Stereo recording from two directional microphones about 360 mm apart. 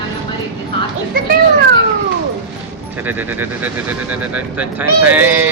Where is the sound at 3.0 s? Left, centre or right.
Centre.